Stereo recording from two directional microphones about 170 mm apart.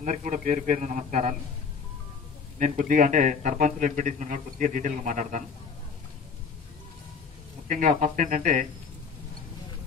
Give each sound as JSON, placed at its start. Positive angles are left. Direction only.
{"t": 0.0, "sound": "a man's voice", "side_deg": -45}
{"t": 2.6, "sound": "a man's voice", "side_deg": -50}
{"t": 7.6, "sound": "a man's voice", "side_deg": -45}